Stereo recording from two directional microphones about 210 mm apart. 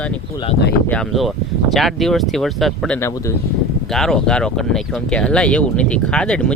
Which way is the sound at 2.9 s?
15° left (ahead or behind).